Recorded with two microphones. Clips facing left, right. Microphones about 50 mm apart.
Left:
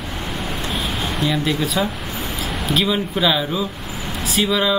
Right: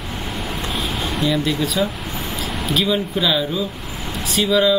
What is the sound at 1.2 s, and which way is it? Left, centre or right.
Speech, centre.